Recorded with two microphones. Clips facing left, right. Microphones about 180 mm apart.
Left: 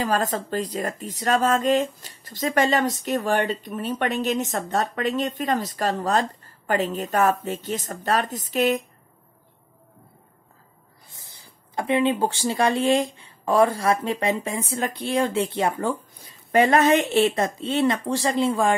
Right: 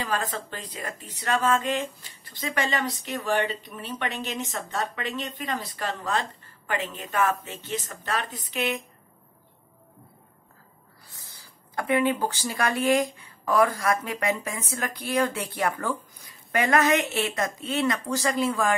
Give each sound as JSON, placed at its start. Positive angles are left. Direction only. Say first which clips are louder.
{"t": 0.0, "sound": "speech", "louder": "left 6 dB", "side_deg": 45}
{"t": 11.1, "sound": "speech", "louder": "left 2 dB", "side_deg": 20}